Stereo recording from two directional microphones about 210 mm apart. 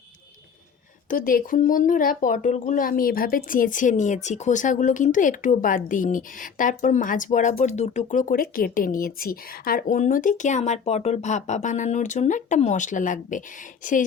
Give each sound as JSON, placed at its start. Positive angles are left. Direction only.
{"t": 1.1, "sound": "speech", "side_deg": 40}